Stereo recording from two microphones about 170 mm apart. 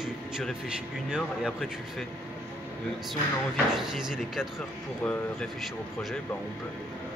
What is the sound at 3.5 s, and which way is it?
Speech, 5° right (ahead or behind).